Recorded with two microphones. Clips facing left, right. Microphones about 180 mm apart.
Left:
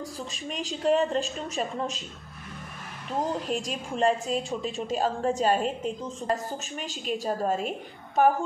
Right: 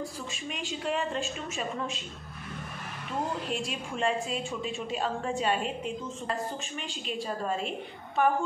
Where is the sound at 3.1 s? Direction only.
40° left (ahead or behind).